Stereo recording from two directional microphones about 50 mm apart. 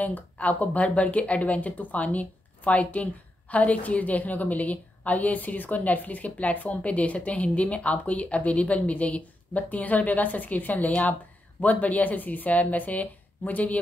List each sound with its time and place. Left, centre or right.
0.0 s a woman's voice: left